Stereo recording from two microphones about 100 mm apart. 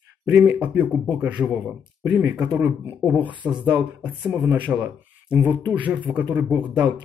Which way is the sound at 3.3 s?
55° right (ahead or behind).